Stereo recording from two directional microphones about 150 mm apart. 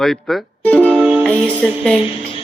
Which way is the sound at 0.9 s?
10° right (ahead or behind).